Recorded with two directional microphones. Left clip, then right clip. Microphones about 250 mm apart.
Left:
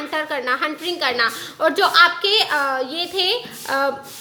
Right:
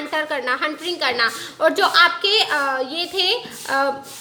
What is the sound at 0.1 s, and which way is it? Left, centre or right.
A woman's voice, centre.